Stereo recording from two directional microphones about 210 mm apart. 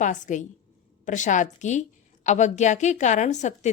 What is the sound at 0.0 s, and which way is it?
A woman's voice, 35° left (ahead or behind).